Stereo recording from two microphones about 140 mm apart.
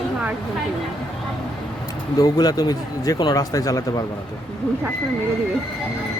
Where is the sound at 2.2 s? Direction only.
25° left (ahead or behind).